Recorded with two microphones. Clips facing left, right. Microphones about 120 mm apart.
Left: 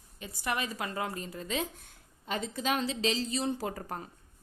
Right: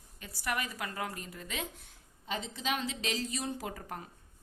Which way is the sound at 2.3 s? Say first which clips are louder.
Left 4 dB; 45° left (ahead or behind).